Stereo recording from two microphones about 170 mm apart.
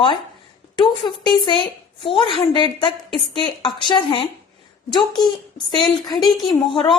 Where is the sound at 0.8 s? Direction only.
30° left (ahead or behind).